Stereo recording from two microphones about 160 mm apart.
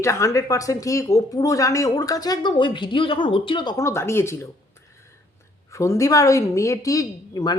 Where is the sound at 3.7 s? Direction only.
15° left (ahead or behind).